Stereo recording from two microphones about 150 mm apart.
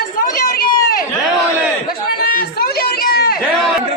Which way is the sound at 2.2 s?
75° left (ahead or behind).